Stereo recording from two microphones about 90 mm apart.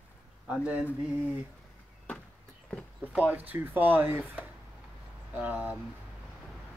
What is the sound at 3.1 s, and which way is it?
Speech, 15° right (ahead or behind).